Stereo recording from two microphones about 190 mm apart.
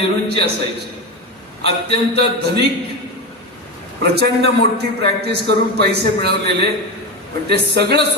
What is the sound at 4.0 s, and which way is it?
A man's voice, 60° right (ahead or behind).